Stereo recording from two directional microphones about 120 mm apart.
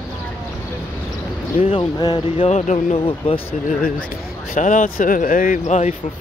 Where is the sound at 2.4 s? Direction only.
70° left (ahead or behind).